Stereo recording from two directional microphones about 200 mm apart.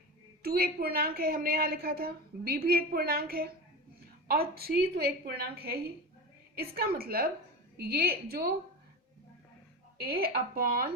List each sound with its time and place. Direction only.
0.4 s a woman's voice: 50° right (ahead or behind)
10.0 s a woman's voice: 50° right (ahead or behind)